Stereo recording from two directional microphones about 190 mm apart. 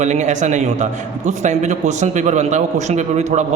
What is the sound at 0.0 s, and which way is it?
A woman's voice, 40° right (ahead or behind).